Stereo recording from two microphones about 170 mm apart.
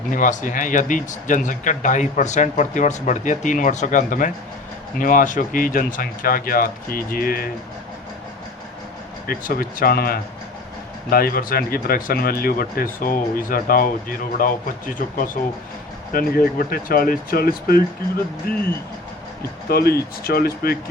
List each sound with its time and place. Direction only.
0.1 s speech: 50° left (ahead or behind)
9.2 s speech: 60° left (ahead or behind)
16.1 s speech: 60° left (ahead or behind)
19.6 s speech: 65° left (ahead or behind)